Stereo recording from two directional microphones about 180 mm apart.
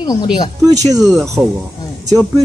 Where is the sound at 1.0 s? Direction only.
Centre (ahead or behind).